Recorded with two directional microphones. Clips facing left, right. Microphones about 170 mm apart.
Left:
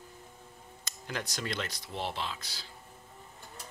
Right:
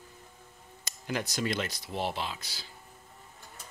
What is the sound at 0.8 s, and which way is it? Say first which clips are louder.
Speech: right 5 dB; 10° right (ahead or behind).